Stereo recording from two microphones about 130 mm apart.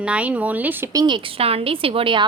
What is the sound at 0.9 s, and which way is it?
A woman's voice, 35° right (ahead or behind).